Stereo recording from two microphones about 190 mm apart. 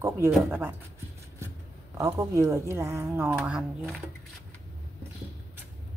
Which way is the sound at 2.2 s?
15° right (ahead or behind).